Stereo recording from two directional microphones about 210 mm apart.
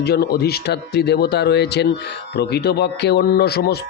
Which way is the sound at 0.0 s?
50° left (ahead or behind).